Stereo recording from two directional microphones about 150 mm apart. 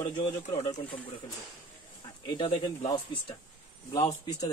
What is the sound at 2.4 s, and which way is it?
Speech, 30° left (ahead or behind).